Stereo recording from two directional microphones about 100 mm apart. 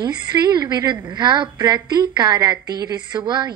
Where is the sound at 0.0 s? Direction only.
45° right (ahead or behind).